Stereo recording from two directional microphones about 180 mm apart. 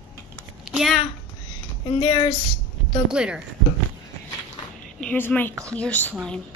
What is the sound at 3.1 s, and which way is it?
Speech, 5° right (ahead or behind).